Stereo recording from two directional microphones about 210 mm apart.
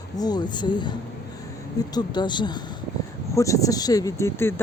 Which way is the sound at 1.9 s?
20° left (ahead or behind).